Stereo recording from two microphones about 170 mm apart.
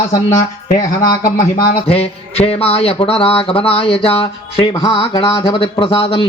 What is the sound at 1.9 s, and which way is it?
Mantra, 35° left (ahead or behind).